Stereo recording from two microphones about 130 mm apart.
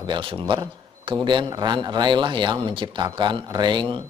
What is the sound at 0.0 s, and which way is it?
A man's voice, 40° right (ahead or behind).